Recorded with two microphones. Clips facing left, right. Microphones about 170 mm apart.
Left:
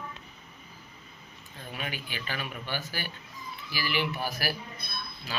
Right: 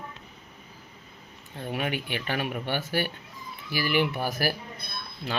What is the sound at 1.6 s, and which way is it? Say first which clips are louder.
Speech: right 8 dB; 55° right (ahead or behind).